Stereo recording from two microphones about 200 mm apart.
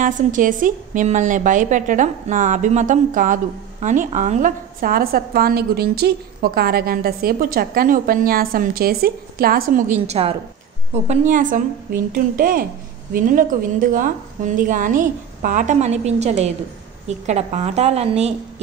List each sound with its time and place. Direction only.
0.0 s a woman's voice: 40° right (ahead or behind)